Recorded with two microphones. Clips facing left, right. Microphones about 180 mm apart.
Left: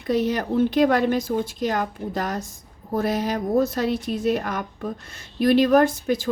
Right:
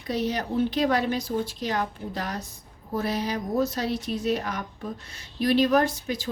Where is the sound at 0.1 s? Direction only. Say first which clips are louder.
Left 5 dB; 50° left (ahead or behind).